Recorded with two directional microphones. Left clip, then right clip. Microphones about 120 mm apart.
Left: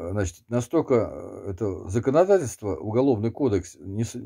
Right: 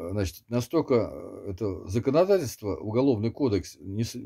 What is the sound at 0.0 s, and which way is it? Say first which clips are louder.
Speech: left 3 dB; 20° right (ahead or behind).